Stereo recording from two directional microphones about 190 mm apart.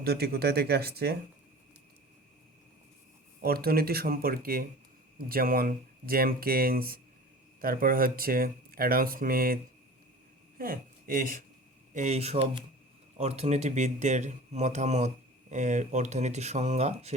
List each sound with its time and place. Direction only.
0.0 s speech: 55° right (ahead or behind)
3.4 s speech: 55° right (ahead or behind)
10.6 s speech: 50° right (ahead or behind)
11.9 s speech: 35° right (ahead or behind)